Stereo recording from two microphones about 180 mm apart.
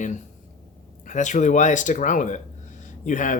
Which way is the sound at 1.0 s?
45° left (ahead or behind).